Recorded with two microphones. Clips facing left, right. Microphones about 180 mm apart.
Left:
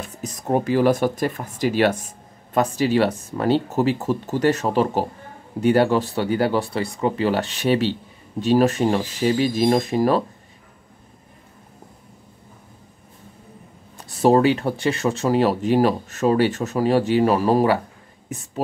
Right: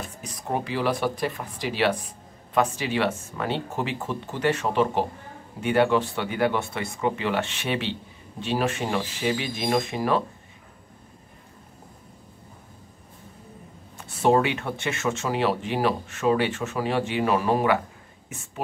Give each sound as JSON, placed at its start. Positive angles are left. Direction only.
{"t": 0.2, "sound": "speech", "side_deg": 45}
{"t": 13.9, "sound": "speech", "side_deg": 40}